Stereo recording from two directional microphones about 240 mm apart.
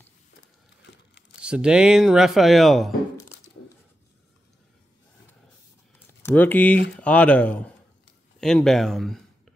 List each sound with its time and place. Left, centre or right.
0.9 s crumpling: left
1.4 s speech: centre
6.2 s speech: centre